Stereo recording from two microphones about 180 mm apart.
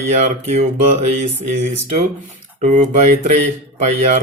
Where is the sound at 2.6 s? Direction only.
40° right (ahead or behind).